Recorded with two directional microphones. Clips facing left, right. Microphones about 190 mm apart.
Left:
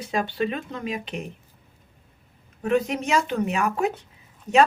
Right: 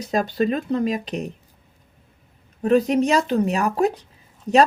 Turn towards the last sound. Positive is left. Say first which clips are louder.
# right 3 dB
turn(degrees=-35)  # may be behind; listen again after turning